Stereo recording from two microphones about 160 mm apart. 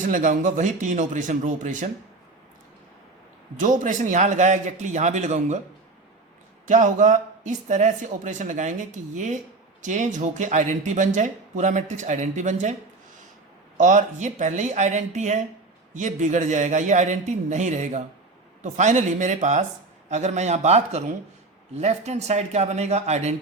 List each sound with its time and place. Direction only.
0.0 s speech: 55° right (ahead or behind)
3.6 s speech: 55° right (ahead or behind)
6.7 s speech: 50° right (ahead or behind)
13.7 s speech: 50° right (ahead or behind)